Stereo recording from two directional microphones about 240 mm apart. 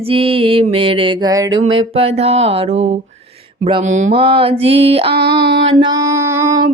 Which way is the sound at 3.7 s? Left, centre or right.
Right.